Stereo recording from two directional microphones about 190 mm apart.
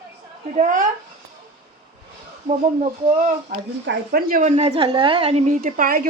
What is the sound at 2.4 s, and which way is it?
Speech, 40° right (ahead or behind).